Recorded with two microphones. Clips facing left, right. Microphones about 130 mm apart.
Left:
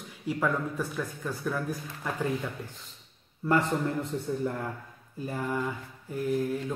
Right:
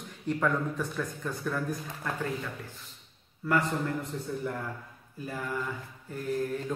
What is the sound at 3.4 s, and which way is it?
Speech, 25° left (ahead or behind).